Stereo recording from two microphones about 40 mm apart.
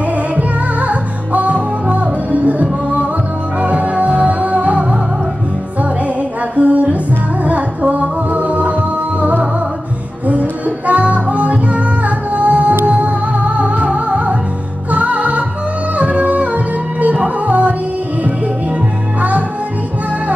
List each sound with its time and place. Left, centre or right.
0.4 s music: right
6.5 s music: right
10.9 s music: right